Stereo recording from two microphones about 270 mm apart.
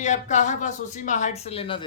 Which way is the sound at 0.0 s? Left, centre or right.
Left.